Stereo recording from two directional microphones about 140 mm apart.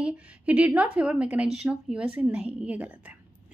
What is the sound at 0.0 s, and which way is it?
Speech, 10° right (ahead or behind).